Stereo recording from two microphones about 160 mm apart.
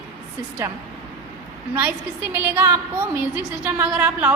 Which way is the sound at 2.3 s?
10° right (ahead or behind).